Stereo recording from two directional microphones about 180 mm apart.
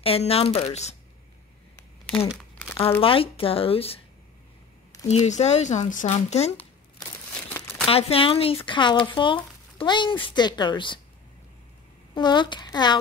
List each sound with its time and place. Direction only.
0.0 s speech: 35° left (ahead or behind)
2.0 s crumpling: 5° left (ahead or behind)
3.0 s speech: 30° left (ahead or behind)
5.0 s speech: 40° left (ahead or behind)
7.9 s speech: 30° left (ahead or behind)
12.1 s speech: 25° left (ahead or behind)